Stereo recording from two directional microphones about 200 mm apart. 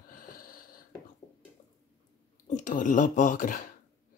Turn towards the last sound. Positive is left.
turn(degrees=40)  # may be behind; listen again after turning